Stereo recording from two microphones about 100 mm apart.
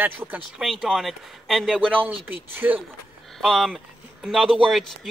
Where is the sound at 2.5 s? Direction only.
20° right (ahead or behind).